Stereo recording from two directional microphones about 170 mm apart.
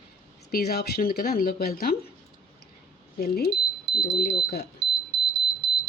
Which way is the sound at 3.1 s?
65° left (ahead or behind).